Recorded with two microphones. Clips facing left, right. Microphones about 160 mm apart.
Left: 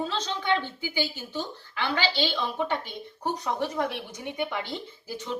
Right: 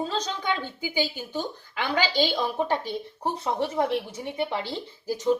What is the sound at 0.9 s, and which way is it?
Speech, 15° right (ahead or behind).